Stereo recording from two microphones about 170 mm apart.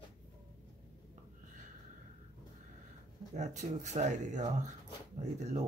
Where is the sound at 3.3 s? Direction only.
45° right (ahead or behind).